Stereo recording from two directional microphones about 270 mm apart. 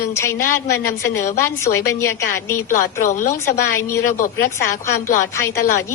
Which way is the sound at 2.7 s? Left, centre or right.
Left.